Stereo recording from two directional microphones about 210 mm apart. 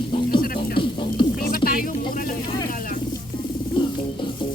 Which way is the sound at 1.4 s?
45° left (ahead or behind).